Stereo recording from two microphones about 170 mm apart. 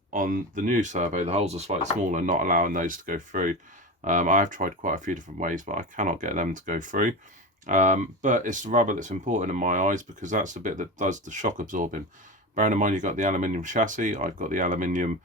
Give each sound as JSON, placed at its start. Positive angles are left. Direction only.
{"t": 0.1, "sound": "speech", "side_deg": -50}